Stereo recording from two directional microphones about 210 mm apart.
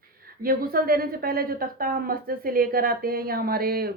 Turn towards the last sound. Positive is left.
turn(degrees=-45)  # may be behind; listen again after turning